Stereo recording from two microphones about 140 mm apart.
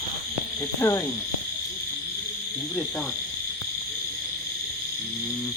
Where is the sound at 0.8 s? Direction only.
25° left (ahead or behind).